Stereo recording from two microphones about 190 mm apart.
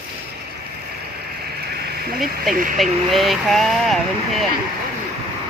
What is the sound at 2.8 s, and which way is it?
Speech, centre (ahead or behind).